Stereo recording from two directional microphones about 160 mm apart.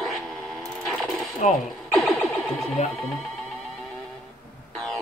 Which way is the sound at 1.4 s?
50° left (ahead or behind).